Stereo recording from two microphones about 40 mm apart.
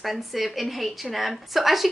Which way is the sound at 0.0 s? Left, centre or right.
Centre.